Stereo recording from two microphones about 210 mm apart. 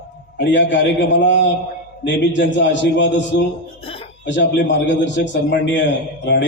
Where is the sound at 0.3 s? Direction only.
55° left (ahead or behind).